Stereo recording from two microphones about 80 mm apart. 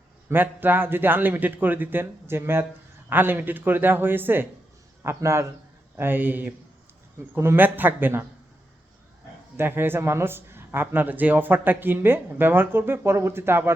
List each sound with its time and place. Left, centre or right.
0.3 s a man's voice: right
6.0 s speech: right
9.6 s speech: right